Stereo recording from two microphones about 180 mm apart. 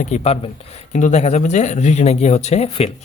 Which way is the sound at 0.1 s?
40° left (ahead or behind).